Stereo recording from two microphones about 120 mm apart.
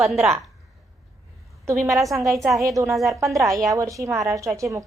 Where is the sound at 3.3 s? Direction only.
25° right (ahead or behind).